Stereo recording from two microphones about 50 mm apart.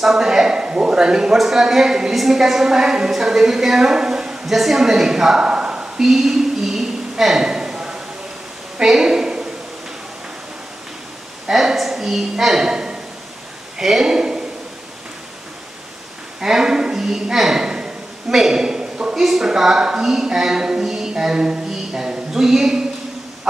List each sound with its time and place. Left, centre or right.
0.0 s a man's voice: centre
5.4 s a sound: centre
6.0 s a sound: centre
8.8 s speech: centre
11.4 s a woman's voice: centre
16.3 s a woman's voice: centre
17.6 s a sound: centre
18.3 s a man's voice: centre
19.1 s speech: centre